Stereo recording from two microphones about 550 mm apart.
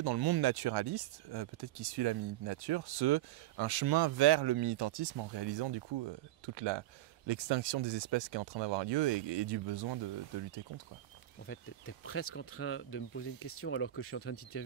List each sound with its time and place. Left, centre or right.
0.0 s speech: right
11.4 s speech: left